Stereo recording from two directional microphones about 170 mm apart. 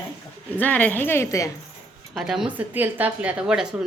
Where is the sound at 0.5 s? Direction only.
10° left (ahead or behind).